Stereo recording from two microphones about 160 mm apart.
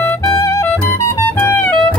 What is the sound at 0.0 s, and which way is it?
Music, 20° left (ahead or behind).